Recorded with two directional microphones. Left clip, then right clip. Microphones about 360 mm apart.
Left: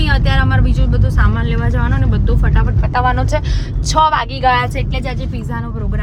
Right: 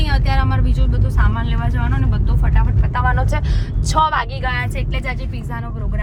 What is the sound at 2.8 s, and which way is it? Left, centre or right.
Speech, centre.